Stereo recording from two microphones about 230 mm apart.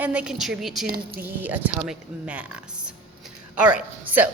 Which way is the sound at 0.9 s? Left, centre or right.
Right.